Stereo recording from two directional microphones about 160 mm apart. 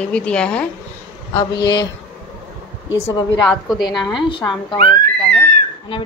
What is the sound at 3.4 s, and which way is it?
Speech, 5° left (ahead or behind).